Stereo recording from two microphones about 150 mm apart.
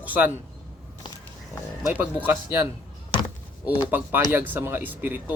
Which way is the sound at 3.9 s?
15° right (ahead or behind).